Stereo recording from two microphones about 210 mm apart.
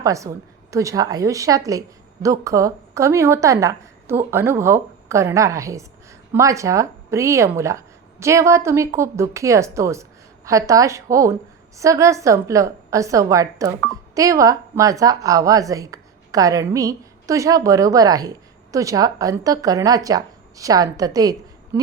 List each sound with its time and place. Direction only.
0.0 s speech: 15° right (ahead or behind)